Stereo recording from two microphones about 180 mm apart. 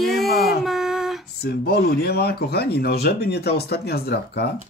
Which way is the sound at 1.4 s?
60° left (ahead or behind).